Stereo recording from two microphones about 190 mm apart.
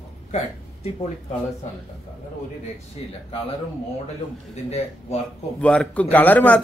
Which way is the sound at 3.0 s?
30° left (ahead or behind).